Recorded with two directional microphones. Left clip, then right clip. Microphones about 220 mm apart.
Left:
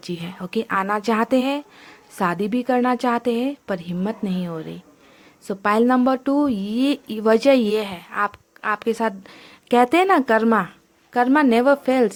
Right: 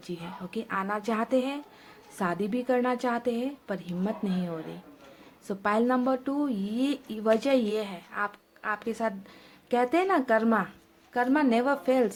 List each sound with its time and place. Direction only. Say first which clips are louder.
0.0 s speech: left 7 dB; 40° left (ahead or behind)